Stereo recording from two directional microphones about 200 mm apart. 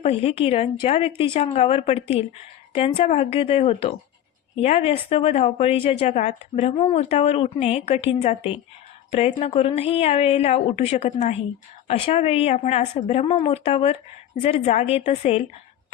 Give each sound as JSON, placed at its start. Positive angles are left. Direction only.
{"t": 0.0, "sound": "a woman's voice", "side_deg": 30}